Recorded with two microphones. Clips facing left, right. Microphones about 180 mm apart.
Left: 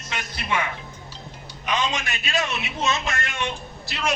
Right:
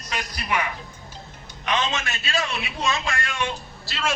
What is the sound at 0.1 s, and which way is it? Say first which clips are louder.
Speech: even; 25° left (ahead or behind).